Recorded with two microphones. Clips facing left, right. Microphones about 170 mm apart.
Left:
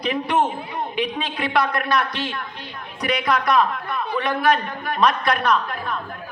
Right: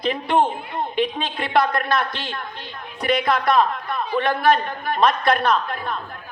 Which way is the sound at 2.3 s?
30° right (ahead or behind).